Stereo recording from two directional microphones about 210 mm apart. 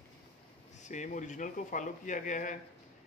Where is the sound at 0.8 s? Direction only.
35° left (ahead or behind).